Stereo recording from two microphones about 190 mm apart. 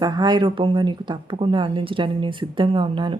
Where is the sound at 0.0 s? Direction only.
20° right (ahead or behind).